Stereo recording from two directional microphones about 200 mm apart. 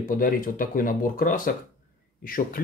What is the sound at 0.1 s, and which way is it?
A man's voice, 45° left (ahead or behind).